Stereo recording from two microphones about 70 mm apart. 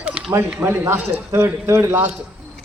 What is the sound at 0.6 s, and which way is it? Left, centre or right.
A man's voice, right.